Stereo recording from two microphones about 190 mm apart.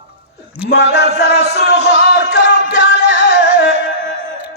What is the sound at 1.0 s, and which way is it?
Music, 35° right (ahead or behind).